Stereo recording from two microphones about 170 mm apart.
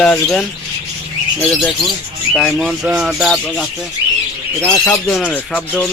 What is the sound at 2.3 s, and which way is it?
Speech, 5° left (ahead or behind).